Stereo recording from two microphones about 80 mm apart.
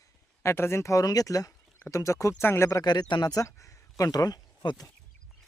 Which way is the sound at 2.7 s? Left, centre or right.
Left.